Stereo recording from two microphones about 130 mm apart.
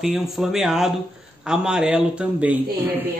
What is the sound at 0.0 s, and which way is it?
A man's voice, 5° right (ahead or behind).